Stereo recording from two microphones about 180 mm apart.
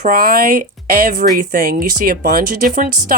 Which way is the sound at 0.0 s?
55° right (ahead or behind).